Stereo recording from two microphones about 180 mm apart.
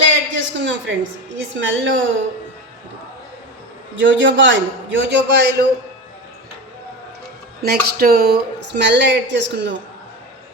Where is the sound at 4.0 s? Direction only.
90° right; by 5.5 s 75° right (ahead or behind).